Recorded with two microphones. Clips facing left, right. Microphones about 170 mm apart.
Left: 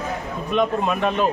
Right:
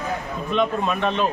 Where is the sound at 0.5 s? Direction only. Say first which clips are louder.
Left 1 dB; 10° left (ahead or behind).